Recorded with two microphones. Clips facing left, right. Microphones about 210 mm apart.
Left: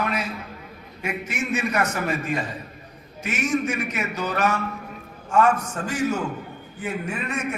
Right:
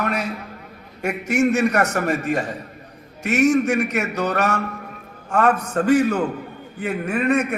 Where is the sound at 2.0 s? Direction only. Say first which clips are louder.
Right 4 dB; 45° right (ahead or behind).